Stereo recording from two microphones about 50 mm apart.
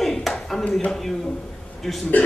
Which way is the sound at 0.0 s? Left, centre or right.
Centre.